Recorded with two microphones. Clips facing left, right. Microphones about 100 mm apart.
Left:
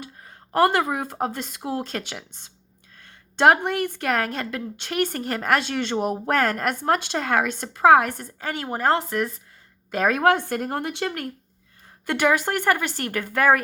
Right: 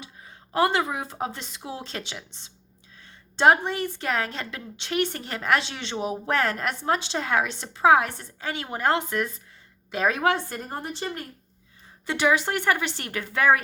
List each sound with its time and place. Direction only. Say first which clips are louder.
0.0 s speech: left 4 dB; 50° left (ahead or behind); by 11.3 s 65° left (ahead or behind)
12.0 s speech: left 2 dB; 55° left (ahead or behind)